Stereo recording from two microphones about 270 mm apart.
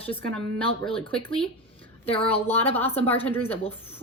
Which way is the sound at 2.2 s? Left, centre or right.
Centre.